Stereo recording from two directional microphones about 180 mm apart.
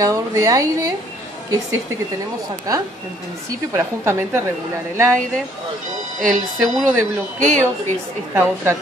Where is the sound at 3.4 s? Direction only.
15° right (ahead or behind).